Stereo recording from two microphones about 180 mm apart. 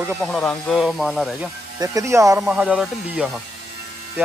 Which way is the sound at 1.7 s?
20° right (ahead or behind).